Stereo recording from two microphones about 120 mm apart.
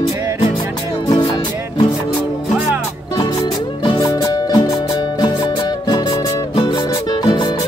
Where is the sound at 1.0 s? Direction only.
35° left (ahead or behind).